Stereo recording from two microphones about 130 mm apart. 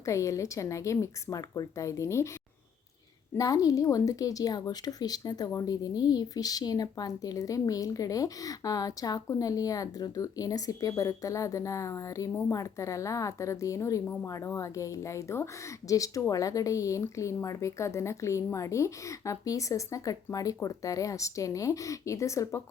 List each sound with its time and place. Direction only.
0.0 s speech: 25° left (ahead or behind)
3.3 s speech: 25° left (ahead or behind)